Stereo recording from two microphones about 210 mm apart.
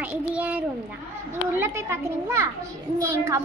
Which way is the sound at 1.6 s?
10° right (ahead or behind).